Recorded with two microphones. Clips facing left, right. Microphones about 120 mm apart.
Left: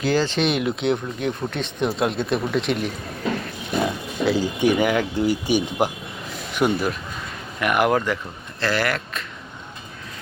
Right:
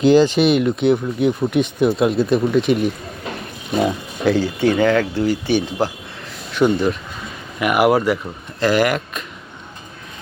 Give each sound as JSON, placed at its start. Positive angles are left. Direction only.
{"t": 0.0, "sound": "speech", "side_deg": -20}
{"t": 4.3, "sound": "speech", "side_deg": 15}
{"t": 7.6, "sound": "speech", "side_deg": -10}